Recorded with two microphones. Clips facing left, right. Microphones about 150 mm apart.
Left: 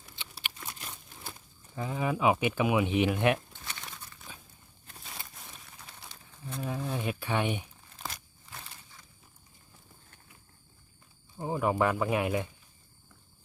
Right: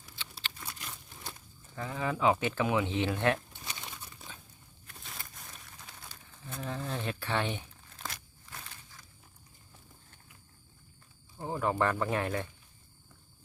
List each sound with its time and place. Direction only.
0.2 s a sound: 20° left (ahead or behind)
1.7 s speech: 15° left (ahead or behind)
3.5 s crumpling: 15° right (ahead or behind)
6.0 s crumpling: 5° left (ahead or behind)
11.3 s speech: 10° left (ahead or behind)